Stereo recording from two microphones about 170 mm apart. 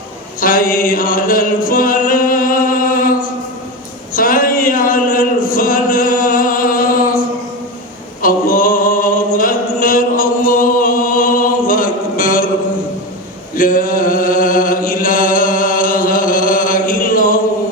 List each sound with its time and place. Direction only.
0.3 s chant: 55° left (ahead or behind)
4.1 s a sound: 55° left (ahead or behind)
8.2 s singing: 55° left (ahead or behind)
13.6 s chant: 55° left (ahead or behind)